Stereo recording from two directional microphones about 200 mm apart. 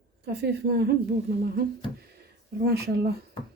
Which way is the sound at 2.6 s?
55° right (ahead or behind).